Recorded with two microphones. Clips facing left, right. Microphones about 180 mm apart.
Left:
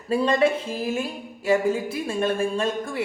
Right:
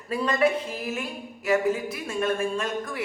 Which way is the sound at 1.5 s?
30° left (ahead or behind).